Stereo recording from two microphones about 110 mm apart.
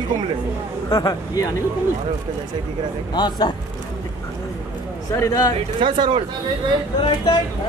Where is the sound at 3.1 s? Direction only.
40° left (ahead or behind).